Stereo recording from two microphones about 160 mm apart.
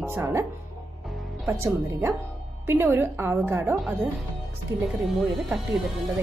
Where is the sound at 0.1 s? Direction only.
15° right (ahead or behind).